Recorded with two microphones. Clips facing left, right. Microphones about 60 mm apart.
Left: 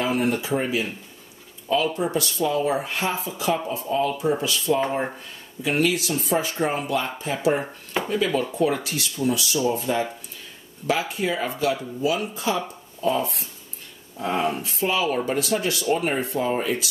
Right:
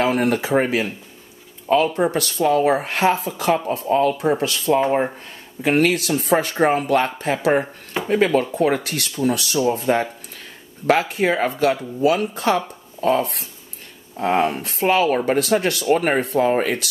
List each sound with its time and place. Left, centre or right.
0.0 s speech: right
2.0 s speech: right
9.6 s speech: right